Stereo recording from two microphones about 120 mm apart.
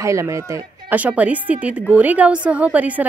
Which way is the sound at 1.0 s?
10° right (ahead or behind).